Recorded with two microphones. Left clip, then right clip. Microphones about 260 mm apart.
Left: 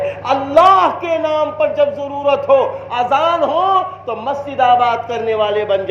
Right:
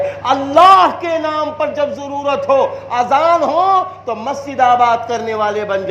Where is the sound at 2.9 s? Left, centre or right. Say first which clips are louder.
Right 2 dB; right.